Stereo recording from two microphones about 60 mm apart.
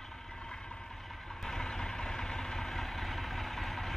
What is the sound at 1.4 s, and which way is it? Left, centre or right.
Vehicle, centre.